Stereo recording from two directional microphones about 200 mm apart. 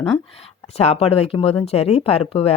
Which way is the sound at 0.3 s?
30° left (ahead or behind).